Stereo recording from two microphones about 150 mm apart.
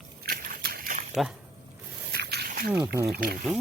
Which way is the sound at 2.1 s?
90° right.